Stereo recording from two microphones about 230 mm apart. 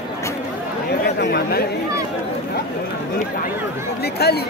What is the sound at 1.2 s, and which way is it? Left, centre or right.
Speech, left.